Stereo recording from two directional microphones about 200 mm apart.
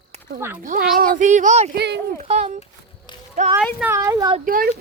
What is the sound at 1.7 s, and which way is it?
Speech, 55° right (ahead or behind).